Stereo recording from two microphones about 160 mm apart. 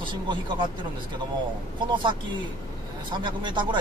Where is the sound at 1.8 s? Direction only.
30° right (ahead or behind).